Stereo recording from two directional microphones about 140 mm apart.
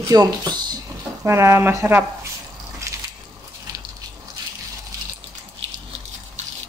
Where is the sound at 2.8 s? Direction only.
20° right (ahead or behind).